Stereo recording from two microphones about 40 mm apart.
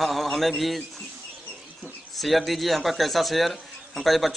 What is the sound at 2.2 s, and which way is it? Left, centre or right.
Speech, centre.